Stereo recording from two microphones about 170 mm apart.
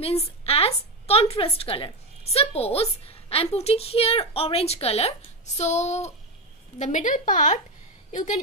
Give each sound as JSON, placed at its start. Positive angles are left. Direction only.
{"t": 0.0, "sound": "a woman's voice", "side_deg": 35}